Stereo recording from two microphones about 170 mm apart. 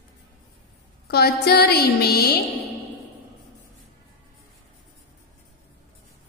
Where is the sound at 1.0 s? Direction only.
65° left (ahead or behind).